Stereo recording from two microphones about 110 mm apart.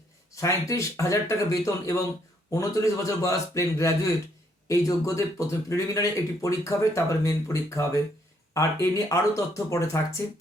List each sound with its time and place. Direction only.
0.7 s a man's voice: 30° left (ahead or behind)